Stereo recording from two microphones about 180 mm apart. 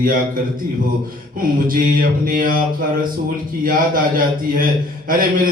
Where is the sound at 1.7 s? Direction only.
50° right (ahead or behind).